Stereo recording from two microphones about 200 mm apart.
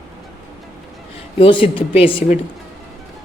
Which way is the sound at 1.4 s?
25° left (ahead or behind).